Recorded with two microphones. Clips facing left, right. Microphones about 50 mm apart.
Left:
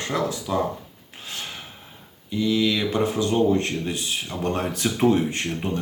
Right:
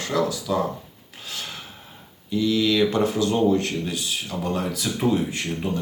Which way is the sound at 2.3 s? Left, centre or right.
Centre.